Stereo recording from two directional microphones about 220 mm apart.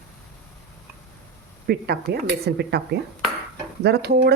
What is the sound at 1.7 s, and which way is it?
A woman's voice, 45° right (ahead or behind).